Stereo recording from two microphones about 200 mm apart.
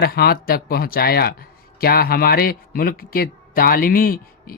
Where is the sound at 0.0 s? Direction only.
50° left (ahead or behind).